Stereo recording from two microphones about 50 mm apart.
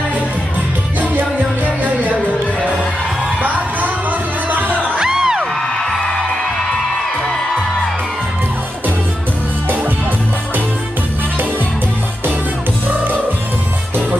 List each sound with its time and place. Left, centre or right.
0.9 s music: right
4.7 s music: left
4.9 s music: centre
5.7 s music: centre
9.6 s music: right